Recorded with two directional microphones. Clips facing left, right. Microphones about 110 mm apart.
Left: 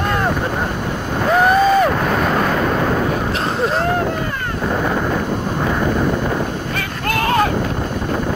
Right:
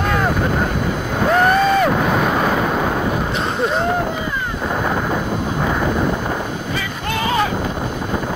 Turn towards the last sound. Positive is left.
turn(degrees=55)  # may be behind; listen again after turning